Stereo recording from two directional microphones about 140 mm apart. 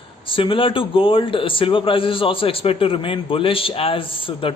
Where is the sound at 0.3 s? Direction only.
40° left (ahead or behind).